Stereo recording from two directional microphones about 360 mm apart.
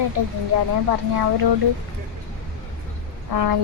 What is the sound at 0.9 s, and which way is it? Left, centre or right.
Speech, right.